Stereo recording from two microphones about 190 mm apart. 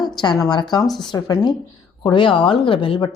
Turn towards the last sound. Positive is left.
turn(degrees=25)  # may be behind; listen again after turning